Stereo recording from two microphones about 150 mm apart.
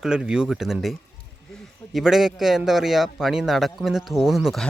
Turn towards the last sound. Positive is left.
turn(degrees=0)  # may be behind; listen again after turning